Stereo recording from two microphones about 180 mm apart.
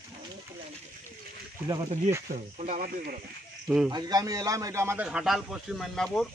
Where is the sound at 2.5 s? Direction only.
45° right (ahead or behind).